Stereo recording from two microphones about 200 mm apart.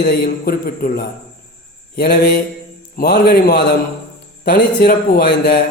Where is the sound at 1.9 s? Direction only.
50° left (ahead or behind).